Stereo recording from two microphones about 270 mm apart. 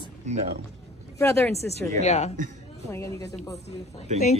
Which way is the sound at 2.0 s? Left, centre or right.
Left.